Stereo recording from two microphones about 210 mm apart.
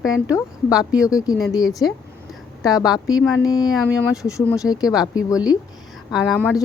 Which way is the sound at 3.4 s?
20° left (ahead or behind).